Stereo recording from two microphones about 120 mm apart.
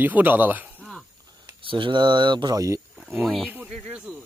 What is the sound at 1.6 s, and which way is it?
Speech, 45° right (ahead or behind).